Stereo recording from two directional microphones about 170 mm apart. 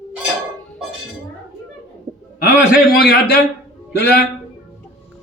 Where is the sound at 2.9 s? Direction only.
65° left (ahead or behind).